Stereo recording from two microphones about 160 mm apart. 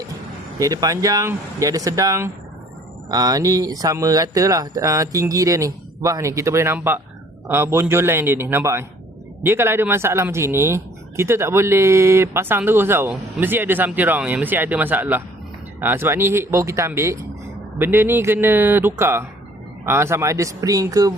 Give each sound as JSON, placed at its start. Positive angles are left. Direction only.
{"t": 0.6, "sound": "speech", "side_deg": -20}